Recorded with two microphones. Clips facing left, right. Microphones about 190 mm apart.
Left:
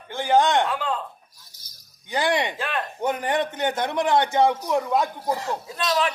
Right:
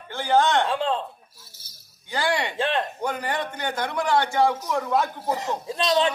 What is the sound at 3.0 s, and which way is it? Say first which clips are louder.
A man's voice: left 4 dB; 20° left (ahead or behind).